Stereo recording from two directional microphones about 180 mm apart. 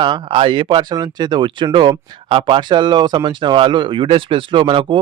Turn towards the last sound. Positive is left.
turn(degrees=-30)  # may be behind; listen again after turning